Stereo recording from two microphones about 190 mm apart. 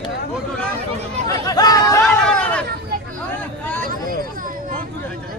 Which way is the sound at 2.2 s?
5° left (ahead or behind).